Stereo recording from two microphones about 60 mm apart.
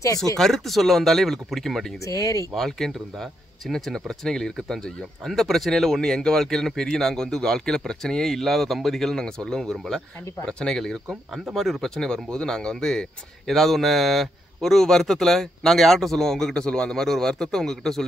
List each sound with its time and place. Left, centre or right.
0.0 s speech: left
0.4 s speech: centre
2.0 s speech: left
2.5 s speech: centre
11.1 s speech: centre